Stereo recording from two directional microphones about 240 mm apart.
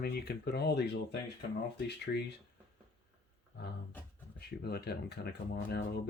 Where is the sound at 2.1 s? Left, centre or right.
Left.